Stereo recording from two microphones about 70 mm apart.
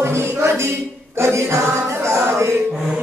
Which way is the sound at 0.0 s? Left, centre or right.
Right.